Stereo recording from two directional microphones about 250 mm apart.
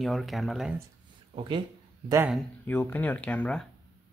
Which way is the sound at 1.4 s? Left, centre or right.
Centre.